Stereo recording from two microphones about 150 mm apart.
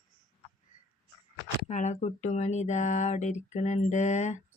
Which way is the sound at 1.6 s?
50° left (ahead or behind).